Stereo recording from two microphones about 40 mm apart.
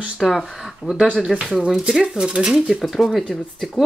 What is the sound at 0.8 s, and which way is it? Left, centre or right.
Speech, right.